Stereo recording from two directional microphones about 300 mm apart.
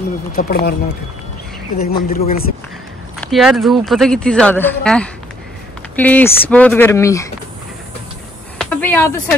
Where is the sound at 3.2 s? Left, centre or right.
Centre.